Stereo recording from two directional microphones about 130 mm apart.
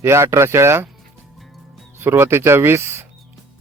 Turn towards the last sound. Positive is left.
turn(degrees=-20)  # may be behind; listen again after turning